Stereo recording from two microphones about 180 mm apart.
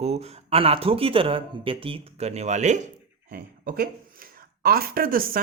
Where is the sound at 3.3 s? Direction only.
55° right (ahead or behind).